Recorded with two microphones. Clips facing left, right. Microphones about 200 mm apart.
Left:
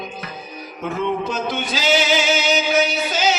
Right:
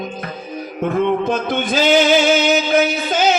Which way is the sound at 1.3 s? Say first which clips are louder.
Right 5 dB; 55° right (ahead or behind).